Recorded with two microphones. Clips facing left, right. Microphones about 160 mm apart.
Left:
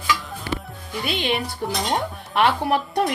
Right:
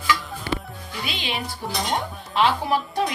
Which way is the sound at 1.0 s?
55° left (ahead or behind).